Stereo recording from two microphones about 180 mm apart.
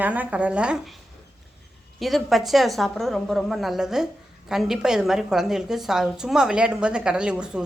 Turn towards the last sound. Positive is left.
turn(degrees=-5)  # may be behind; listen again after turning